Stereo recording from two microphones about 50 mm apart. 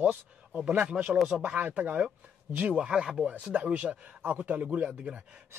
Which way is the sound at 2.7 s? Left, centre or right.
Centre.